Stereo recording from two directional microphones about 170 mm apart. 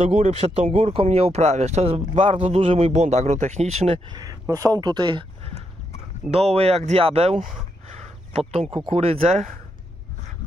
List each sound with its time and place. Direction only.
0.1 s speech: 40° right (ahead or behind)
4.1 s speech: 20° right (ahead or behind)
6.3 s speech: 40° right (ahead or behind)